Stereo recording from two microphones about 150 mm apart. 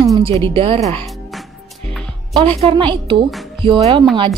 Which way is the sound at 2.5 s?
35° right (ahead or behind).